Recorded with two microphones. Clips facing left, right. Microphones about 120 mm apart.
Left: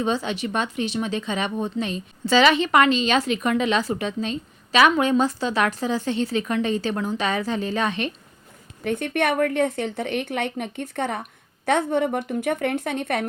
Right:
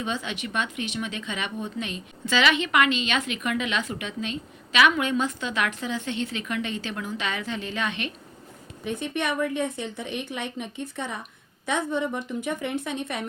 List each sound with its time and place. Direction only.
0.0 s speech: 35° left (ahead or behind)
8.8 s a woman's voice: 60° left (ahead or behind)